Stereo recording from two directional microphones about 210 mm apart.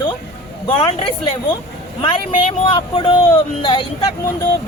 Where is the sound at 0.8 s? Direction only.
25° left (ahead or behind).